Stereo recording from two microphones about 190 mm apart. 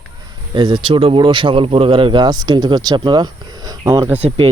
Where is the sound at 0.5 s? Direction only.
25° right (ahead or behind).